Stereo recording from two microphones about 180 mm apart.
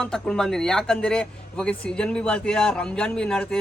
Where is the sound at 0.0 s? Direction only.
5° left (ahead or behind).